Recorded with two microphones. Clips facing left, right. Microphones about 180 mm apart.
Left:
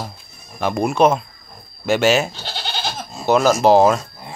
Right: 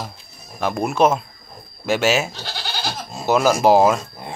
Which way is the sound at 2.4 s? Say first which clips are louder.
Left 1 dB; 25° left (ahead or behind).